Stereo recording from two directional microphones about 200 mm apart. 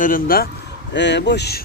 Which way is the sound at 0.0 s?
45° left (ahead or behind).